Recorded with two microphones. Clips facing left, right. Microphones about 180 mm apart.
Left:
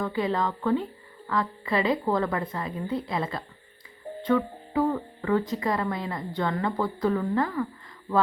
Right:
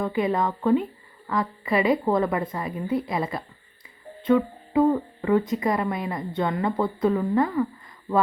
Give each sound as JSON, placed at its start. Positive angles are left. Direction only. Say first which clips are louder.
{"t": 0.0, "sound": "a woman's voice", "louder": "right 3 dB", "side_deg": -20}